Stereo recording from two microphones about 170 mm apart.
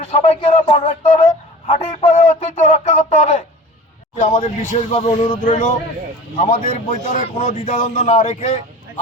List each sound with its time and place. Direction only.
0.0 s speech: 40° left (ahead or behind)
4.9 s speech: 35° left (ahead or behind)
5.5 s speech: 45° left (ahead or behind)